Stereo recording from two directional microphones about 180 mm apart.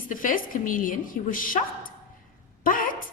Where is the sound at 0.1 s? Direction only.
50° left (ahead or behind).